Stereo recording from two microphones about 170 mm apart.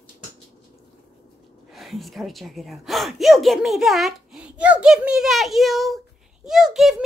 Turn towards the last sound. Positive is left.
turn(degrees=0)  # may be behind; listen again after turning